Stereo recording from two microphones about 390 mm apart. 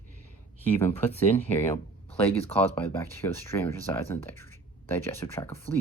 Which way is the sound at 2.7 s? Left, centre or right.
Centre.